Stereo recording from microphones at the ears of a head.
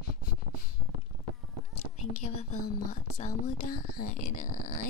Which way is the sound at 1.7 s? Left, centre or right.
Left.